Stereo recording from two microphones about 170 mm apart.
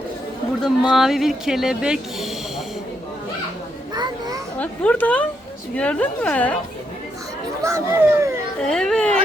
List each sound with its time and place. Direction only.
0.6 s speech: 5° right (ahead or behind)
3.9 s children playing: 25° right (ahead or behind)
4.5 s a woman's voice: 5° left (ahead or behind)
7.6 s speech: 15° right (ahead or behind)
8.6 s speech: 5° left (ahead or behind)